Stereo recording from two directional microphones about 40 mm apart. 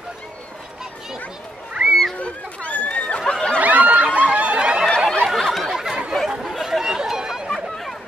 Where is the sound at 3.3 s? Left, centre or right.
Left.